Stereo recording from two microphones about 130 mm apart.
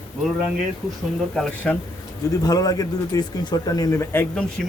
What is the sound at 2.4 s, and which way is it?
A man's voice, 30° left (ahead or behind).